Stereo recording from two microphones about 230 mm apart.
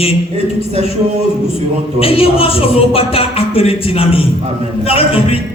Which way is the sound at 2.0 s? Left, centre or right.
Left.